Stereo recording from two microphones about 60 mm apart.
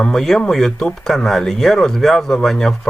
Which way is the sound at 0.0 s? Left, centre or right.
Centre.